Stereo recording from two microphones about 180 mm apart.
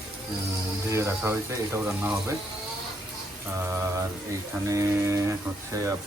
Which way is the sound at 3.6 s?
15° right (ahead or behind).